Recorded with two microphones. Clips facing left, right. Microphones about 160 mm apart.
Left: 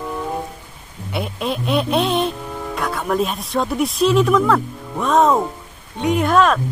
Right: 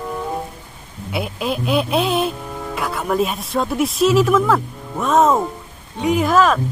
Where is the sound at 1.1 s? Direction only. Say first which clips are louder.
Right 1 dB; centre (ahead or behind).